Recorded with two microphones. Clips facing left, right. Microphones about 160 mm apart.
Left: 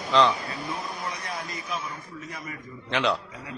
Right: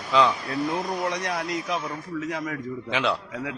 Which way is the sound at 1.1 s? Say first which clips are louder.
Right 7 dB; 80° right.